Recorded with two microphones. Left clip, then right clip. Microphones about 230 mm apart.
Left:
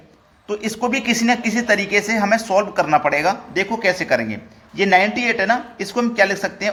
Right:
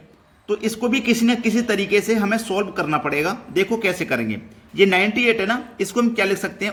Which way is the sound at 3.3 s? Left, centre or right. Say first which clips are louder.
Left 1 dB; right.